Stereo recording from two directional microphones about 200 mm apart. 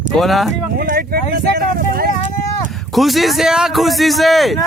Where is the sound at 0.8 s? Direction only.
45° right (ahead or behind).